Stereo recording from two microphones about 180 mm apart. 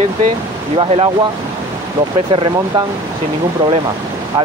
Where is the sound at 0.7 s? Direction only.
30° right (ahead or behind).